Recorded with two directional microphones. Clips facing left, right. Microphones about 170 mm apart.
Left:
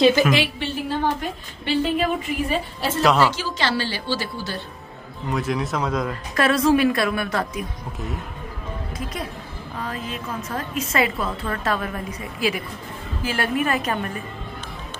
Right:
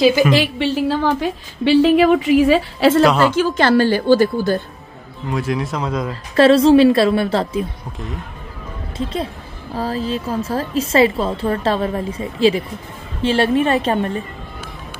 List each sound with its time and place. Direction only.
0.0 s speech: centre (ahead or behind)
0.6 s a woman's voice: 90° right
3.0 s speech: centre (ahead or behind)
3.3 s a woman's voice: 55° right (ahead or behind)
5.3 s speech: centre (ahead or behind)
6.3 s a woman's voice: 30° right (ahead or behind)
8.9 s a woman's voice: 25° right (ahead or behind)